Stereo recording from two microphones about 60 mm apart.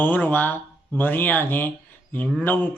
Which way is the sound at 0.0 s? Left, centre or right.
Left.